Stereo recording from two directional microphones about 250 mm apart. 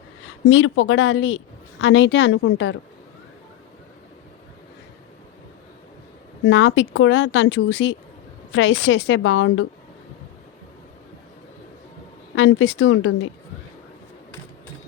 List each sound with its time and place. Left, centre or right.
0.4 s speech: left
6.5 s speech: left
12.3 s speech: left